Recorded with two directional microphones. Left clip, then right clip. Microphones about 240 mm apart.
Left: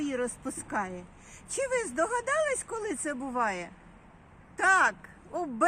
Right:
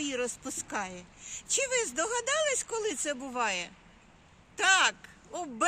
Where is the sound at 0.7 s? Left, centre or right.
Right.